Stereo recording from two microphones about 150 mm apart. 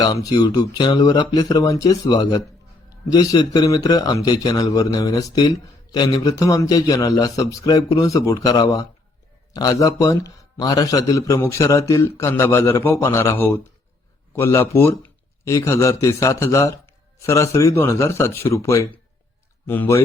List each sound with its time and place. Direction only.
0.0 s a man's voice: 25° left (ahead or behind)